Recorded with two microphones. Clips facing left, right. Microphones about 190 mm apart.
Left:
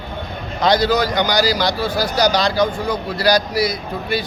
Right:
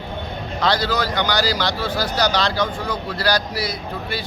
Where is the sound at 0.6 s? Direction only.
15° left (ahead or behind).